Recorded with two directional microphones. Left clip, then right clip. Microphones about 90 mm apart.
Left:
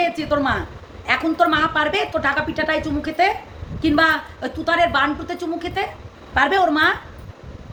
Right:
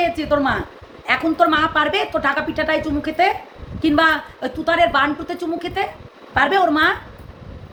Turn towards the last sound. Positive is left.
turn(degrees=-15)  # may be behind; listen again after turning